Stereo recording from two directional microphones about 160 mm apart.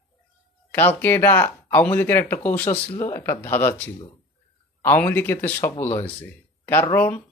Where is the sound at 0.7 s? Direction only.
10° left (ahead or behind).